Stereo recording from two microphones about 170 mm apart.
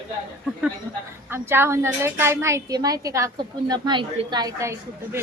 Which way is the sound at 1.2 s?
15° right (ahead or behind).